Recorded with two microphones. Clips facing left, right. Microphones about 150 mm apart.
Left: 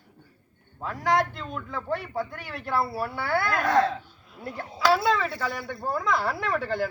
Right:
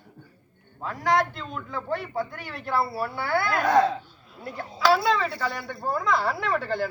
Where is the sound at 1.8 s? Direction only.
10° left (ahead or behind).